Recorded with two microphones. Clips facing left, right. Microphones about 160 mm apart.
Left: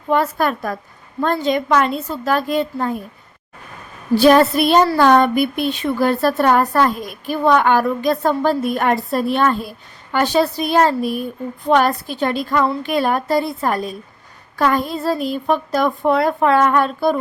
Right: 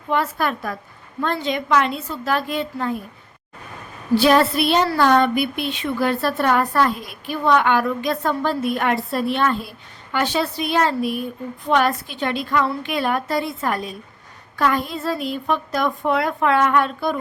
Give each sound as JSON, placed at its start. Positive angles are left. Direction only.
{"t": 0.1, "sound": "a woman's voice", "side_deg": 40}
{"t": 4.2, "sound": "a woman's voice", "side_deg": 45}